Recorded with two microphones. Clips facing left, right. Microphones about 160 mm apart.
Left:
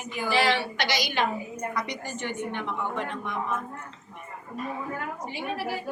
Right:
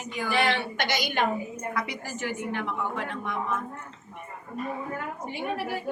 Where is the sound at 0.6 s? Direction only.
50° right (ahead or behind).